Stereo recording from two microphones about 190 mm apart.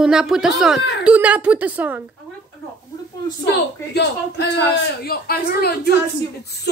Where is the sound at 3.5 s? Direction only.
60° left (ahead or behind).